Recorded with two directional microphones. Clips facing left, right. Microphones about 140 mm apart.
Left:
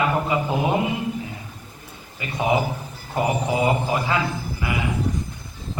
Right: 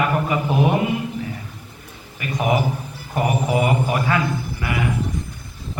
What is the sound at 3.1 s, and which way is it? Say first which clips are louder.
A man's voice: right 2 dB; 20° left (ahead or behind).